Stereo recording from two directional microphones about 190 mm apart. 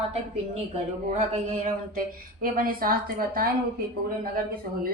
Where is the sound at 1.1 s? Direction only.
35° right (ahead or behind).